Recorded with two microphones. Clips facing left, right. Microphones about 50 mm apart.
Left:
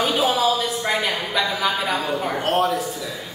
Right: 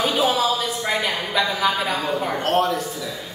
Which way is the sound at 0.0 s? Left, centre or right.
Centre.